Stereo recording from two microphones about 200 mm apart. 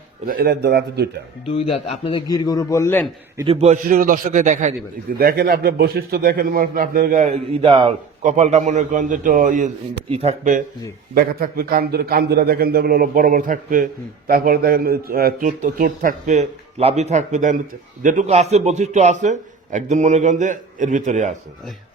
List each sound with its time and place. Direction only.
0.3 s a man's voice: 50° right (ahead or behind)
1.5 s a man's voice: 30° left (ahead or behind); by 3.1 s 10° left (ahead or behind)
3.4 s a man's voice: 30° right (ahead or behind)
8.2 s a man's voice: 35° right (ahead or behind)